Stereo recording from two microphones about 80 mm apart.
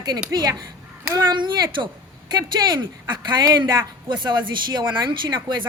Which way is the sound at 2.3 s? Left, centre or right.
Right.